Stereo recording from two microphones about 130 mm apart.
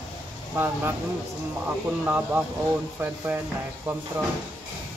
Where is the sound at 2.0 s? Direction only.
15° right (ahead or behind).